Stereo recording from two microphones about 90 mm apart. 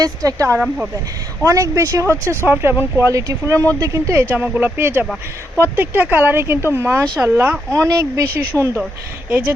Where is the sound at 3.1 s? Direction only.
35° right (ahead or behind).